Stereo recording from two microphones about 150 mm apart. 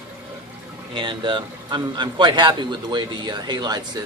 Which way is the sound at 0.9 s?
35° right (ahead or behind).